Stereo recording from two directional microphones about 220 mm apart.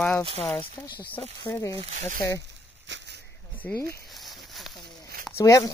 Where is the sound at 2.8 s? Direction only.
55° right (ahead or behind).